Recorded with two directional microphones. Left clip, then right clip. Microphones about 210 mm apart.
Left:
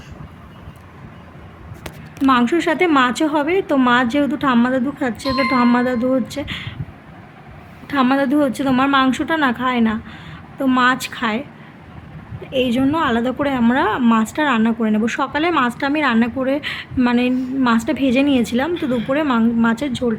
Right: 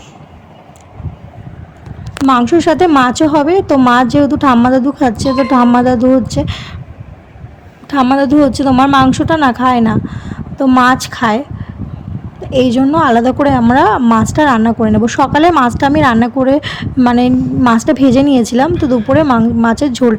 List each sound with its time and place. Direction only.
2.3 s a woman's voice: 25° right (ahead or behind)
7.9 s a woman's voice: 20° right (ahead or behind)
12.8 s a woman's voice: 20° right (ahead or behind)